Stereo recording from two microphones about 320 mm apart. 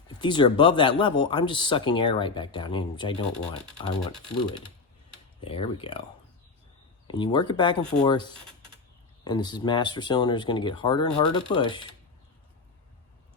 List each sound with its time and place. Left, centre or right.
0.1 s speech: centre
5.4 s speech: centre
7.1 s speech: centre